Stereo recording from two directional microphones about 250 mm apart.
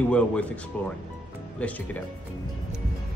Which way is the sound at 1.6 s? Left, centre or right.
Centre.